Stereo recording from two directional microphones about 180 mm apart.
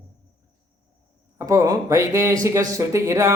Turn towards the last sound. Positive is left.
turn(degrees=-15)  # may be behind; listen again after turning